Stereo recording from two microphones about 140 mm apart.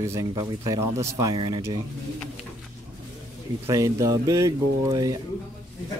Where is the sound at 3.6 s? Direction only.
25° right (ahead or behind).